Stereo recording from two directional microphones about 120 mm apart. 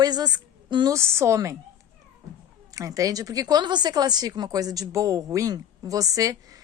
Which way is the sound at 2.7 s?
30° right (ahead or behind).